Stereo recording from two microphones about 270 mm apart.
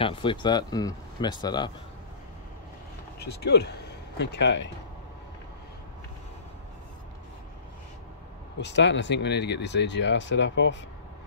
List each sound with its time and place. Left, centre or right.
0.0 s speech: centre
3.2 s speech: left
8.5 s speech: left